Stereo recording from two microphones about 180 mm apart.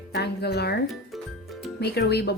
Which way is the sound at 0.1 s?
65° left (ahead or behind).